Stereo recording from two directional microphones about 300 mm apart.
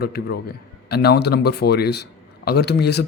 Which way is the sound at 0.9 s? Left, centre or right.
Left.